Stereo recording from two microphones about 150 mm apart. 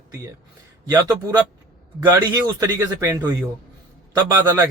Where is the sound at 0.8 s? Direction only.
25° right (ahead or behind).